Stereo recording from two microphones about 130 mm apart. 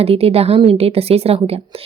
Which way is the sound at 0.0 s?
50° right (ahead or behind).